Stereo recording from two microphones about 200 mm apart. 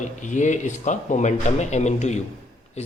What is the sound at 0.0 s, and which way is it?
A man's voice, 40° left (ahead or behind).